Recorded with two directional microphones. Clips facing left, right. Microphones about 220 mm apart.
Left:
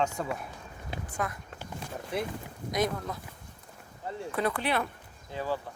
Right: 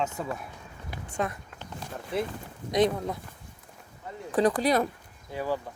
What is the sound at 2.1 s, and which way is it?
Speech, centre (ahead or behind).